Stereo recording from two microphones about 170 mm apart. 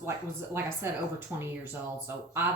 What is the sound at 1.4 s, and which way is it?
A woman's voice, 15° right (ahead or behind).